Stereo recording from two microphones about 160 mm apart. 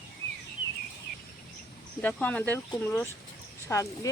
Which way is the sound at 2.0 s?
10° left (ahead or behind).